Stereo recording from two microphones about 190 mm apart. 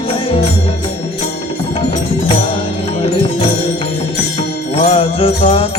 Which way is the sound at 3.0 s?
30° left (ahead or behind).